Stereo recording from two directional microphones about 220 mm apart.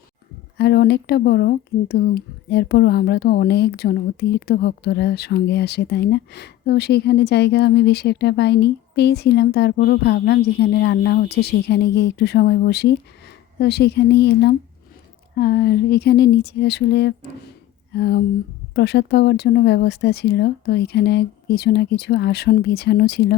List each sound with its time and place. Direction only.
0.5 s speech: 50° left (ahead or behind)